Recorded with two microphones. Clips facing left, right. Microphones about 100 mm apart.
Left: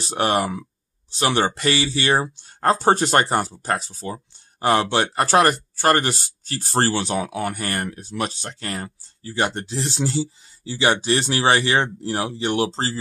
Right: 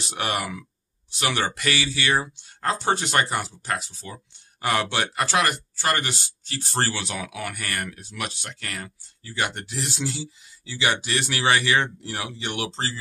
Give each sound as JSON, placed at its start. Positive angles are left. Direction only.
{"t": 0.0, "sound": "speech", "side_deg": 35}